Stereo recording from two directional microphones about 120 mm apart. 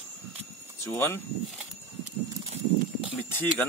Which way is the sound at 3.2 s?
15° left (ahead or behind).